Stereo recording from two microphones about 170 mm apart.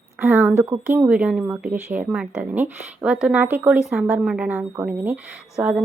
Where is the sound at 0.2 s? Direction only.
15° right (ahead or behind).